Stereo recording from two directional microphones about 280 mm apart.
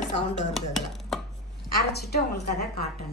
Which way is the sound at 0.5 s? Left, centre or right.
Centre.